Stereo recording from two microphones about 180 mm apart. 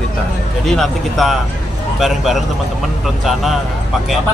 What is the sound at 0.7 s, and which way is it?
Speech, centre (ahead or behind).